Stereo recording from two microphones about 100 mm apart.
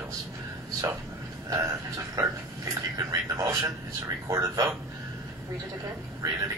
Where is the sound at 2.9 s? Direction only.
35° right (ahead or behind).